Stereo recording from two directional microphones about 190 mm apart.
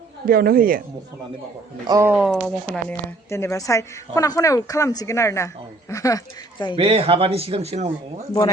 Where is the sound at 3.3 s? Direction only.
15° left (ahead or behind).